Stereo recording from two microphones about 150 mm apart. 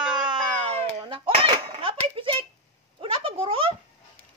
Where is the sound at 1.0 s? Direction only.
35° right (ahead or behind).